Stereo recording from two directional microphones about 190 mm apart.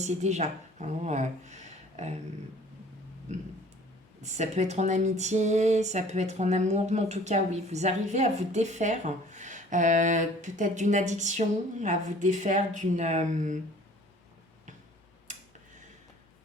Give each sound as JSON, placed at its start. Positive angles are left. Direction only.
{"t": 0.0, "sound": "a woman's voice", "side_deg": -35}
{"t": 3.3, "sound": "speech", "side_deg": -40}